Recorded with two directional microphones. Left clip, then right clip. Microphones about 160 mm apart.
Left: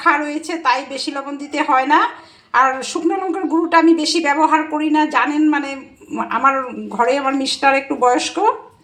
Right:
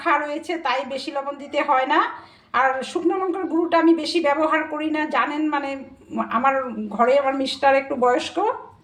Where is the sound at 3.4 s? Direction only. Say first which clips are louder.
Left 5 dB; 35° left (ahead or behind).